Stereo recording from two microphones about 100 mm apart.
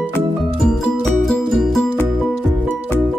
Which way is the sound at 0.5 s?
5° left (ahead or behind).